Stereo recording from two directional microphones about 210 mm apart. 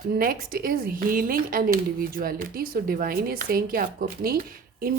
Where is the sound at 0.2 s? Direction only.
45° right (ahead or behind).